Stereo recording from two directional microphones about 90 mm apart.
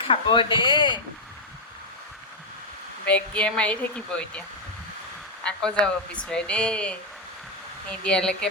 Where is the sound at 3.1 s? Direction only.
15° left (ahead or behind).